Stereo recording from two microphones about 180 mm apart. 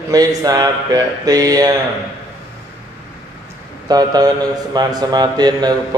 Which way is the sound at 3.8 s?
20° right (ahead or behind).